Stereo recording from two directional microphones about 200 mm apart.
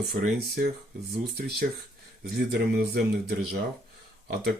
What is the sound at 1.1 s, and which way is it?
Speech, 55° right (ahead or behind).